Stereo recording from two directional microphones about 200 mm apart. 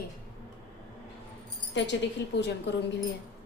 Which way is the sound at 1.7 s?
65° left (ahead or behind).